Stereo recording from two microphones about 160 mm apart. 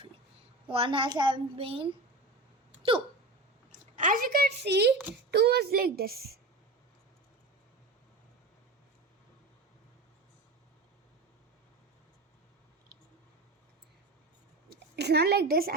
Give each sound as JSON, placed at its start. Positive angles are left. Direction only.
{"t": 0.7, "sound": "a woman's voice", "side_deg": -35}
{"t": 3.7, "sound": "a child's voice", "side_deg": -55}
{"t": 14.9, "sound": "a woman's voice", "side_deg": -90}